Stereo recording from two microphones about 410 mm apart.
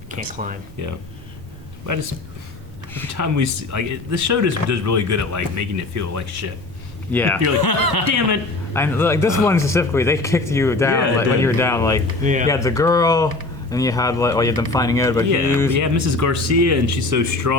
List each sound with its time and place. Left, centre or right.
0.3 s speech: centre
3.1 s speech: right
7.1 s speech: centre
7.6 s speech: left
8.7 s speech: centre
12.2 s speech: centre
12.5 s speech: centre
15.7 s speech: right